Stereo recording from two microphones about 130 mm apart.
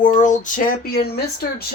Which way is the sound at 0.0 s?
80° left.